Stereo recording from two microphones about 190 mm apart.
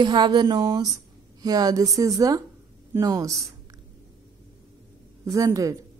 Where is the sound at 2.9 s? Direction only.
15° right (ahead or behind).